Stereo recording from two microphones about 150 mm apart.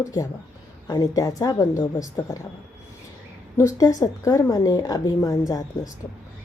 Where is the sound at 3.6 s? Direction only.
20° left (ahead or behind).